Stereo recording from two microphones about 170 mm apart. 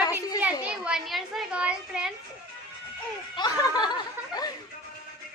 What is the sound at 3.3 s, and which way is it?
Speech, 25° left (ahead or behind).